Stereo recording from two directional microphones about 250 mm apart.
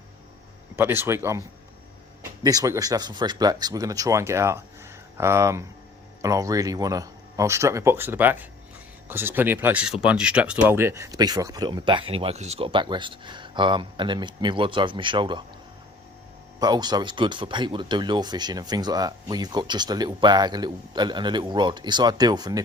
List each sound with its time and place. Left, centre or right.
0.8 s speech: centre
16.6 s speech: centre